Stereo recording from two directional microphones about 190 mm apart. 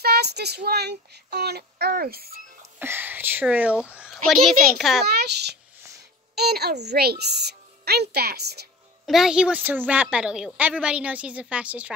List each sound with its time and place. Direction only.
0.0 s speech: 55° right (ahead or behind)
2.8 s a woman's voice: 10° right (ahead or behind)
5.0 s speech: 60° right (ahead or behind)
9.0 s a woman's voice: centre (ahead or behind)